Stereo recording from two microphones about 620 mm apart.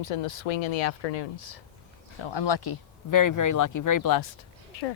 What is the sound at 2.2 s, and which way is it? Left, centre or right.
Speech, left.